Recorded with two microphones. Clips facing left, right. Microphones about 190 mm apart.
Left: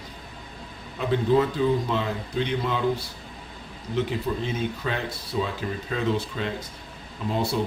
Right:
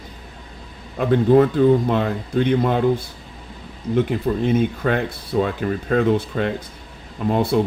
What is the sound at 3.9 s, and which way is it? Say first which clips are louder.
Speech: right 6 dB; 55° right (ahead or behind).